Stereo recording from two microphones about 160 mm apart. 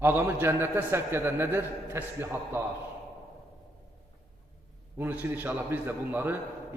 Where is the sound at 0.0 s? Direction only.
15° right (ahead or behind).